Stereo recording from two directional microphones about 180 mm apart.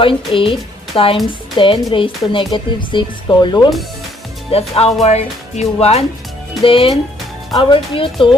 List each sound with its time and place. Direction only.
0.0 s speech: 30° left (ahead or behind)
4.5 s speech: 35° left (ahead or behind)